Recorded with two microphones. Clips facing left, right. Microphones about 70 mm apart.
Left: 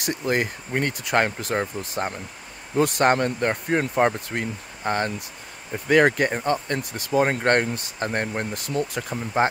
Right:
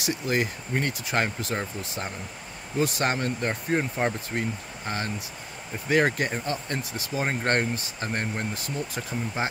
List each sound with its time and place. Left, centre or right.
0.0 s speech: left
2.8 s speech: left
9.0 s speech: left
9.4 s speech: left